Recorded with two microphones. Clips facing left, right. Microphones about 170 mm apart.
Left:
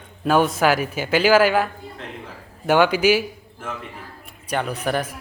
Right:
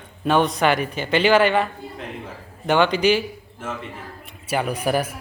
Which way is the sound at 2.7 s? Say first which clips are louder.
Left 1 dB; 5° left (ahead or behind).